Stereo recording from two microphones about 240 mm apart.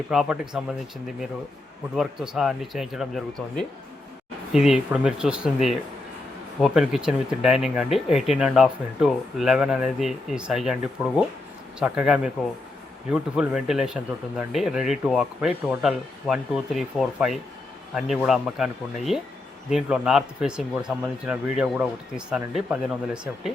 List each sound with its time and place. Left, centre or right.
0.1 s speech: centre
2.0 s speech: centre